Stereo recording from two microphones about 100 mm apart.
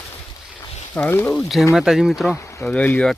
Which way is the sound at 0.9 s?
20° left (ahead or behind).